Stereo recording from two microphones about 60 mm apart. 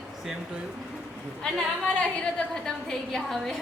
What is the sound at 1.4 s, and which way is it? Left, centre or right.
A woman's voice, centre.